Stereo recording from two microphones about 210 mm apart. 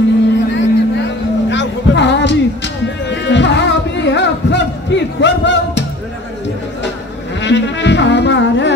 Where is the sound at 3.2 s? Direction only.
55° left (ahead or behind).